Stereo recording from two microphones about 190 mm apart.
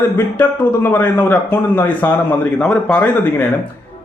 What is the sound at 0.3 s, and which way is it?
Speech, 10° left (ahead or behind).